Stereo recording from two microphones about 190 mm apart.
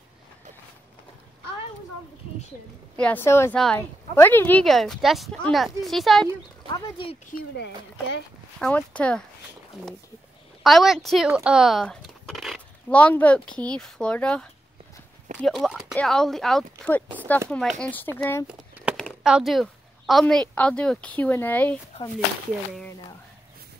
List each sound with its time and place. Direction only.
3.0 s speech: 10° left (ahead or behind)
6.7 s speech: 30° left (ahead or behind)
7.2 s speech: 55° left (ahead or behind)
8.5 s speech: 5° left (ahead or behind)
10.6 s speech: centre (ahead or behind)
18.5 s a sound: 5° right (ahead or behind)
18.9 s speech: centre (ahead or behind)